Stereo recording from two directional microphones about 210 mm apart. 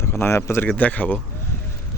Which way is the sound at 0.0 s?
10° left (ahead or behind).